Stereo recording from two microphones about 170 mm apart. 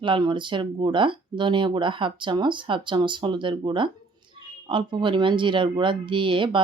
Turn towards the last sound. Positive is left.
turn(degrees=-30)  # may be behind; listen again after turning